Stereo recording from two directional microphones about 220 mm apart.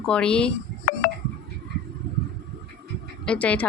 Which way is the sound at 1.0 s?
40° left (ahead or behind).